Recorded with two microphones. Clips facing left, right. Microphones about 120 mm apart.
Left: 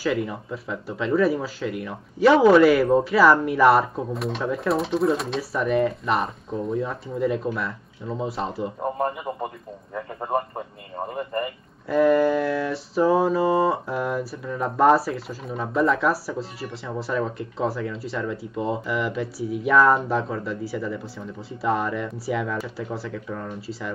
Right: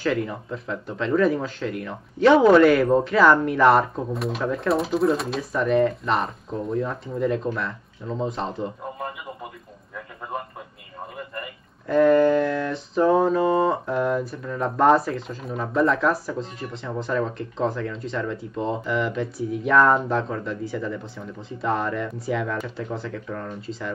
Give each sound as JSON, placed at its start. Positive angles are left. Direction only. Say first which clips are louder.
{"t": 0.0, "sound": "mantra", "louder": "even", "side_deg": 5}
{"t": 8.9, "sound": "a man's voice", "louder": "left 7 dB", "side_deg": 40}
{"t": 11.9, "sound": "mantra", "louder": "right 2 dB", "side_deg": 5}